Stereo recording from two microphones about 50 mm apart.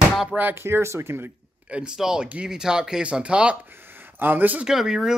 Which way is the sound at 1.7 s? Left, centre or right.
Centre.